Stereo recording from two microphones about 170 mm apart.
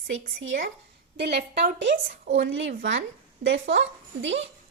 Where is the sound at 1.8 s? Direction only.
90° right.